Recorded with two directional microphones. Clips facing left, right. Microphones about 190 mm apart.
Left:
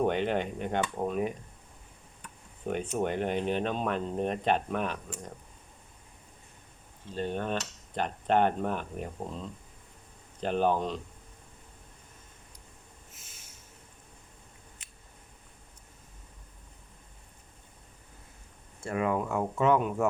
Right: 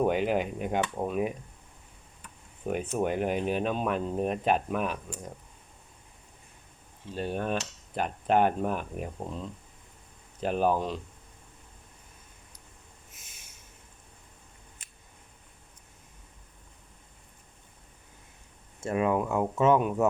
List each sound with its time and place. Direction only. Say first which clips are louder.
0.1 s speech: right 2 dB; 5° right (ahead or behind)
2.7 s speech: right 2 dB; 5° right (ahead or behind)
7.1 s speech: right 1 dB; 10° right (ahead or behind)
10.4 s speech: right 1 dB; 5° right (ahead or behind)
13.1 s snort: even; 15° right (ahead or behind)
18.8 s speech: right 3 dB; 20° right (ahead or behind)